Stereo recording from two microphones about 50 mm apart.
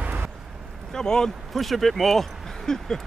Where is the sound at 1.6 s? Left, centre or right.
Centre.